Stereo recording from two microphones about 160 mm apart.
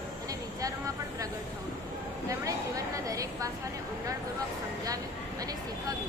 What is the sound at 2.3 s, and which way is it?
A woman's voice, 20° right (ahead or behind).